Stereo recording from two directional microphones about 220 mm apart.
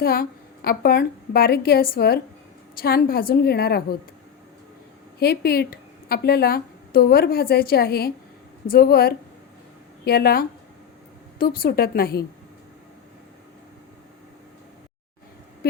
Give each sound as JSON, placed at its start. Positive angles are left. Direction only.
{"t": 0.0, "sound": "a woman's voice", "side_deg": 45}
{"t": 5.2, "sound": "a woman's voice", "side_deg": 45}